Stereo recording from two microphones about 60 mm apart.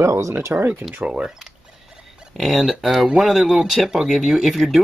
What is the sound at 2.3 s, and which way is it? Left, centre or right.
Speech, centre.